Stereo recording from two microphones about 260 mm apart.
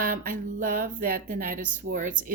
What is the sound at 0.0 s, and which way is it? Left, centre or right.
Speech, right.